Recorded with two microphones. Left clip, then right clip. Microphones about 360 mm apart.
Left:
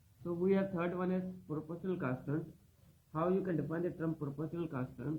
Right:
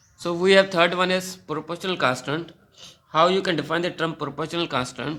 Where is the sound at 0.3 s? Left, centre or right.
Right.